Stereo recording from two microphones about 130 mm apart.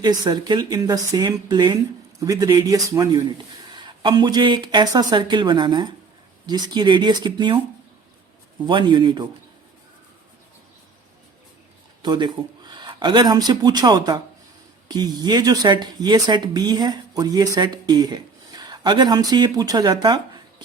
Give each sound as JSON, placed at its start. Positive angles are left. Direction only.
{"t": 0.0, "sound": "speech", "side_deg": -35}
{"t": 8.6, "sound": "speech", "side_deg": -35}
{"t": 12.0, "sound": "a man's voice", "side_deg": -35}